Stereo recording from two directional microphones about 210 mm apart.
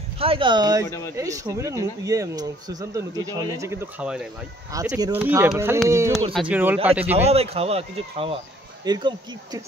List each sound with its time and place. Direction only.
0.2 s speech: 25° right (ahead or behind)
0.8 s speech: 15° left (ahead or behind)
1.1 s speech: 15° right (ahead or behind)
4.7 s speech: 15° right (ahead or behind)
7.2 s speech: 30° right (ahead or behind)
8.8 s speech: 20° right (ahead or behind)